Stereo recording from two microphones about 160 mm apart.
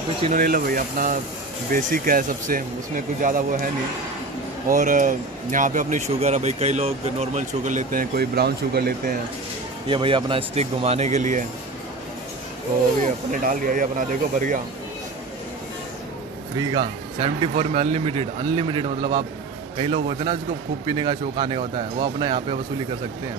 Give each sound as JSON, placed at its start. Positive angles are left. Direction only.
{"t": 0.3, "sound": "speech", "side_deg": -60}
{"t": 9.8, "sound": "speech", "side_deg": -30}
{"t": 13.3, "sound": "speech", "side_deg": -55}
{"t": 16.5, "sound": "speech", "side_deg": -25}